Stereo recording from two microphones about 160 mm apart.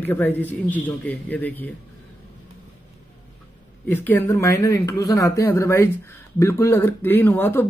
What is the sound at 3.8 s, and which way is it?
Speech, 10° left (ahead or behind).